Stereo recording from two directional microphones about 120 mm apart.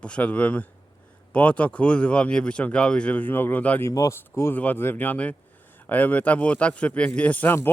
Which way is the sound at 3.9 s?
30° left (ahead or behind).